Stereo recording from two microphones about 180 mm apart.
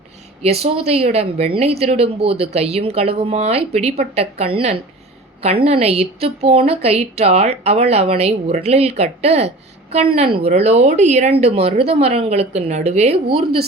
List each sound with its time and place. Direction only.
0.6 s speech: 35° right (ahead or behind)